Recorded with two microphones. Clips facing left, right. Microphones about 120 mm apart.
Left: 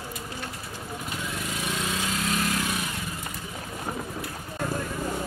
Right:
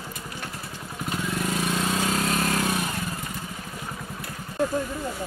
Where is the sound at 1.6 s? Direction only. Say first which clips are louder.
Right 3 dB; 40° right (ahead or behind).